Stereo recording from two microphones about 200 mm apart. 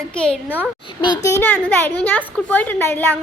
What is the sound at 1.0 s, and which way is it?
Speech, 20° left (ahead or behind).